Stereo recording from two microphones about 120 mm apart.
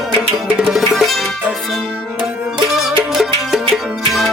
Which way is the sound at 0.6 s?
5° right (ahead or behind).